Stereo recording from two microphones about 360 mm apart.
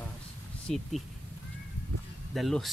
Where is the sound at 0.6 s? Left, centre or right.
Centre.